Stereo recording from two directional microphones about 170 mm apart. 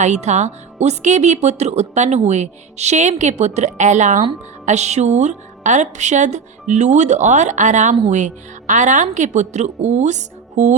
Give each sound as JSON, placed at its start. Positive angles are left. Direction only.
{"t": 0.0, "sound": "a woman's voice", "side_deg": -40}